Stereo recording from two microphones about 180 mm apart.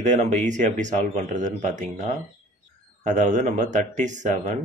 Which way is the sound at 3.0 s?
45° right (ahead or behind).